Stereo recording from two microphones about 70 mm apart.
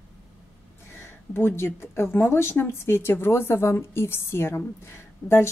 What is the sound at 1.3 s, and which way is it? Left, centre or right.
A woman's voice, left.